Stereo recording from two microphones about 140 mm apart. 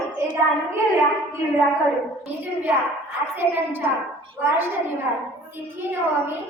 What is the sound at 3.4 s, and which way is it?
Speech, 15° right (ahead or behind).